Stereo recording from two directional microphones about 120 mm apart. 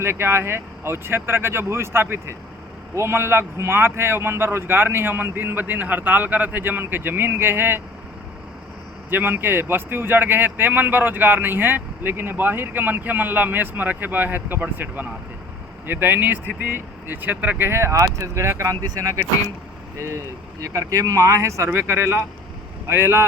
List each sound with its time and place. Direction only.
0.0 s a man's voice: 20° right (ahead or behind)
9.0 s a man's voice: 15° right (ahead or behind)